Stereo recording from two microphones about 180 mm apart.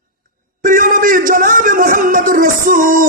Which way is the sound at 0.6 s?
50° right (ahead or behind).